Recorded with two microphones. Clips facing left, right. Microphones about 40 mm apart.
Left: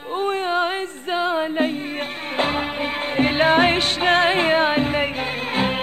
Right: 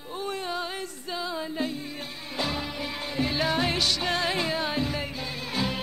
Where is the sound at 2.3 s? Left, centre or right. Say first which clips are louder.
Left 8 dB; left.